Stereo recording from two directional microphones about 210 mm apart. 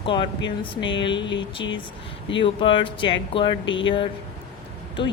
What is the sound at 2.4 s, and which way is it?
Speech, 25° left (ahead or behind).